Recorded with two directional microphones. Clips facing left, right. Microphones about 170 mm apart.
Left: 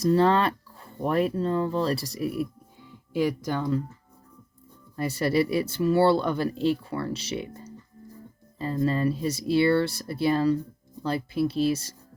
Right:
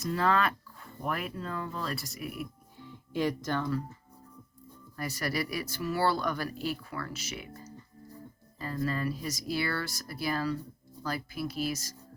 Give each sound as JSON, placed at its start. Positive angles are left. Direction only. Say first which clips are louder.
{"t": 0.0, "sound": "speech", "louder": "left 7 dB", "side_deg": 30}
{"t": 3.1, "sound": "speech", "louder": "left 4 dB", "side_deg": 10}
{"t": 4.9, "sound": "speech", "louder": "left 9 dB", "side_deg": 25}